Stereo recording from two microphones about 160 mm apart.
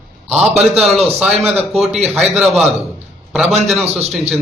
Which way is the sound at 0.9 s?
40° right (ahead or behind).